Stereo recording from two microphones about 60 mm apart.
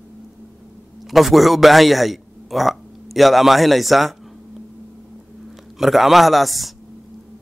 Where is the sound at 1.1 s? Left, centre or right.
Centre.